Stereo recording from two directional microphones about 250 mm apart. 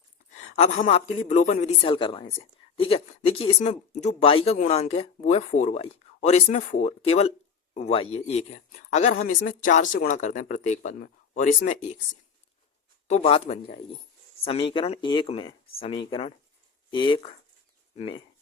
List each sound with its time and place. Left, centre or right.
0.4 s speech: left
13.1 s speech: left